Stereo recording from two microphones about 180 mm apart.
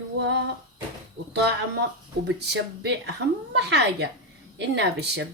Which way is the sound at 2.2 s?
70° right (ahead or behind).